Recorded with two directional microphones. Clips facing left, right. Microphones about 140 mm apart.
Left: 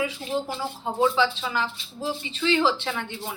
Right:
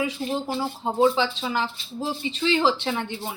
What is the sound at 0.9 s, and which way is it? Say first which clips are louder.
Speech: right 1 dB; 25° right (ahead or behind).